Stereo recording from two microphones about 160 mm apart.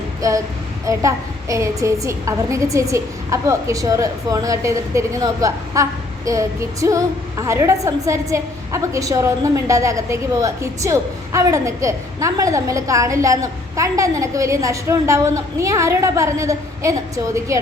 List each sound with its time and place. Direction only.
0.2 s a woman's voice: 20° right (ahead or behind)